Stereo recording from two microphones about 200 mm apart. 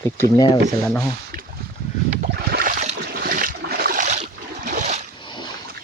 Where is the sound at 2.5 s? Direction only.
50° right (ahead or behind).